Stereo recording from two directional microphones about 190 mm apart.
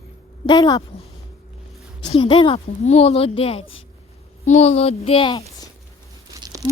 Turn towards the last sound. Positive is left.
turn(degrees=-20)  # may be behind; listen again after turning